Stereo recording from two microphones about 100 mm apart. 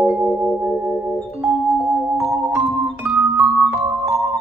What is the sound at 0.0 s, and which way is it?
Music, 20° right (ahead or behind).